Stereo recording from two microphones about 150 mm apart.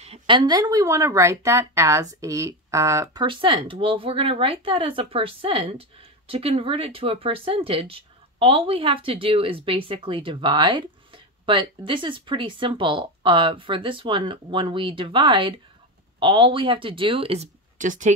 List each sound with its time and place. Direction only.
0.0 s a sound: 40° right (ahead or behind)
0.4 s speech: 25° right (ahead or behind)
17.7 s speech: 55° right (ahead or behind)